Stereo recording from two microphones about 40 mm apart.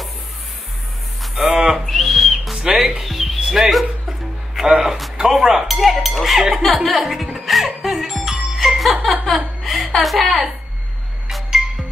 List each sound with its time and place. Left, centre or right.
1.3 s a sound: centre
1.9 s whistling: centre
2.5 s music: centre
2.9 s music: centre
5.1 s a sound: centre
5.7 s a sound: centre
6.4 s speech: centre
7.3 s music: centre
9.2 s laughter: centre
9.9 s speech: centre
11.2 s music: centre